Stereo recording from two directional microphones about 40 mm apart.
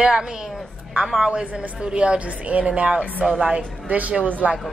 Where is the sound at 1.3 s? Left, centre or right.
Right.